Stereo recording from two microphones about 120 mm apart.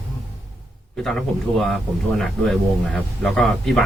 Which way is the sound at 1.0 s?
Centre (ahead or behind).